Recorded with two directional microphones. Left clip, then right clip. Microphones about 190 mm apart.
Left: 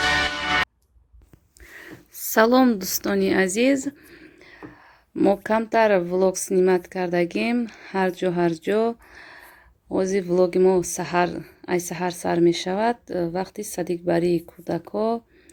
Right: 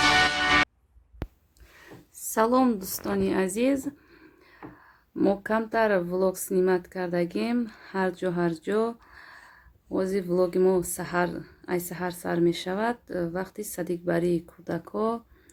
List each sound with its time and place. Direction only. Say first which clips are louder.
2.3 s a woman's voice: left 5 dB; 25° left (ahead or behind)